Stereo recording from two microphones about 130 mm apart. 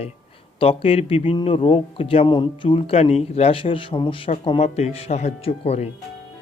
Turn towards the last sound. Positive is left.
turn(degrees=55)  # may be behind; listen again after turning